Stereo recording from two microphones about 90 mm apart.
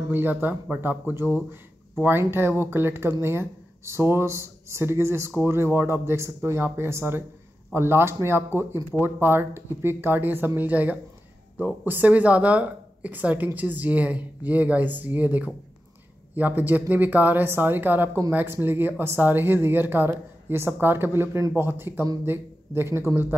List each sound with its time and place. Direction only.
0.1 s speech: 20° right (ahead or behind)